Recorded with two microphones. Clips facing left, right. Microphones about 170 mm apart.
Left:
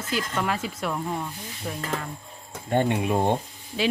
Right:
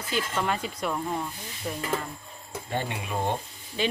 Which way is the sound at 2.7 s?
55° left (ahead or behind).